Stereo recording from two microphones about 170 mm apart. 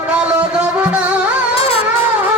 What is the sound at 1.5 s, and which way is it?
Music, 35° left (ahead or behind).